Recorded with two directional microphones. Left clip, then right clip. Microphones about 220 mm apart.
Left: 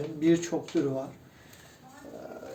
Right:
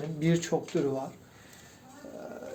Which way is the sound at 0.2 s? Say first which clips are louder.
Left 5 dB; 50° right (ahead or behind).